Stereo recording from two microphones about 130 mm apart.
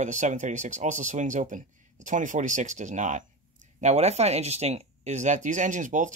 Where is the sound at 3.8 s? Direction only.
60° right (ahead or behind); by 6.1 s 80° right.